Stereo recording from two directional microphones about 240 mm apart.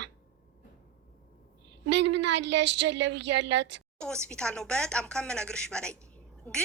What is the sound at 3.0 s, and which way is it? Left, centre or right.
Speech, right.